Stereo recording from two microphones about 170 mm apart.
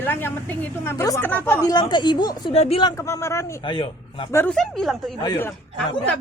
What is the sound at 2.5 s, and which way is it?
Speech, 40° left (ahead or behind).